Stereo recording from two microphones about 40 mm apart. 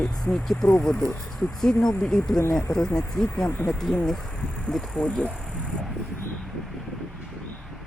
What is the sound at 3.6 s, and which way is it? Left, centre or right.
Speech, left.